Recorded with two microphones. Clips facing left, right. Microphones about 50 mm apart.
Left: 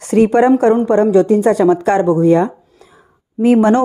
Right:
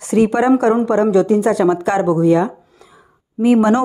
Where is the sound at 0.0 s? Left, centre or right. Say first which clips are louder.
Left 3 dB; left.